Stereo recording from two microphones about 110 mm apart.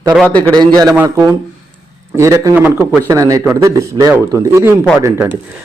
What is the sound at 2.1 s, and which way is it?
Speech, 30° right (ahead or behind).